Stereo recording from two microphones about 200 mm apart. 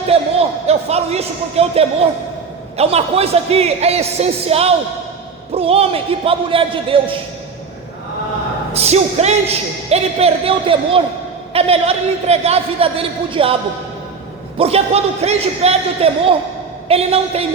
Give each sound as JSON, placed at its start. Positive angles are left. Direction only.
{"t": 0.1, "sound": "a man's voice", "side_deg": -30}
{"t": 8.7, "sound": "a man's voice", "side_deg": -30}
{"t": 14.6, "sound": "a man's voice", "side_deg": -30}